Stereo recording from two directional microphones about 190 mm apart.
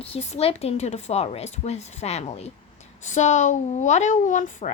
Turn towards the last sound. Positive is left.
turn(degrees=40)  # may be behind; listen again after turning